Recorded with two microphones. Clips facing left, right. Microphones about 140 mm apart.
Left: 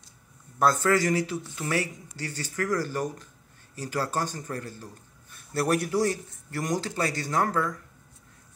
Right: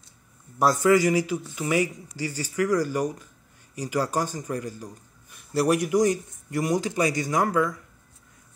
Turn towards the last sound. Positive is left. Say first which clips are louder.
# right 3 dB
turn(degrees=-10)  # may be behind; listen again after turning